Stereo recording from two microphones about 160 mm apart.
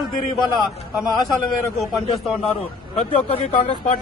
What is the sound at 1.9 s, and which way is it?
Speech, centre (ahead or behind).